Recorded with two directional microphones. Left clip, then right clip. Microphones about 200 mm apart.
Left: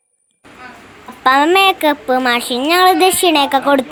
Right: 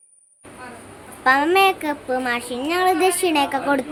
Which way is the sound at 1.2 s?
20° left (ahead or behind).